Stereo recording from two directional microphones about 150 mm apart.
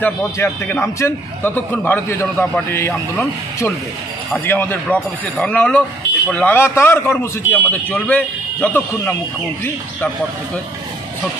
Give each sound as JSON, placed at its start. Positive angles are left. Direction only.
{"t": 0.0, "sound": "a man's voice", "side_deg": 15}